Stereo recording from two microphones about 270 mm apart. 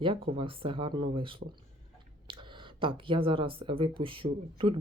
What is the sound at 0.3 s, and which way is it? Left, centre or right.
Speech, centre.